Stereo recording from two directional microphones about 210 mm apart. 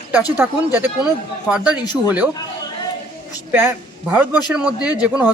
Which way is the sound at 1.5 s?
5° right (ahead or behind).